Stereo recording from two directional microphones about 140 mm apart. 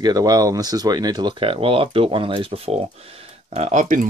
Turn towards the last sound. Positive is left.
turn(degrees=-65)  # may be behind; listen again after turning